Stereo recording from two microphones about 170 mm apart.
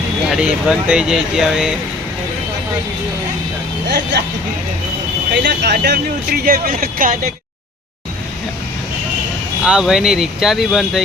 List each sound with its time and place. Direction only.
0.3 s speech: 5° right (ahead or behind)
3.8 s speech: 80° right
5.3 s speech: 90° right; by 7.2 s 55° right (ahead or behind)
9.6 s speech: 5° right (ahead or behind)